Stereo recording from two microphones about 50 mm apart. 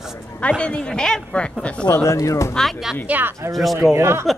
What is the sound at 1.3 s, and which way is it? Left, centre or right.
Speech, left.